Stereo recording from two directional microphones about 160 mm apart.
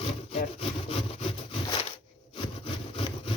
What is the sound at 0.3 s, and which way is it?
Sawing, 35° left (ahead or behind).